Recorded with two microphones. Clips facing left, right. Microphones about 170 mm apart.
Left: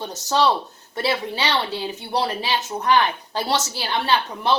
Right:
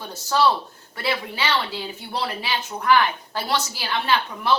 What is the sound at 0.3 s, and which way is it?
Speech, 20° left (ahead or behind).